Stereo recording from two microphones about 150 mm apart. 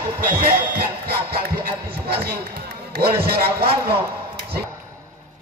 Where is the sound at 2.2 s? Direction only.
90° right.